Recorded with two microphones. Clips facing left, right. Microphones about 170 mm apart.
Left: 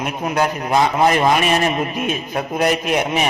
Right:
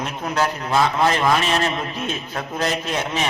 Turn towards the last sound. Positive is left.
turn(degrees=15)  # may be behind; listen again after turning